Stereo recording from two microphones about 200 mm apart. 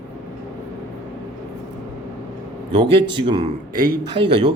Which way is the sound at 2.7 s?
25° right (ahead or behind).